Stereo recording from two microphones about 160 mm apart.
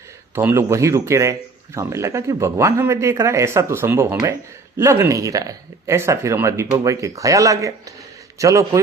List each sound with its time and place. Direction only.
0.3 s speech: 15° right (ahead or behind)